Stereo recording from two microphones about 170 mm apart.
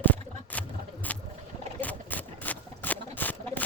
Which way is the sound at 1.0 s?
10° left (ahead or behind).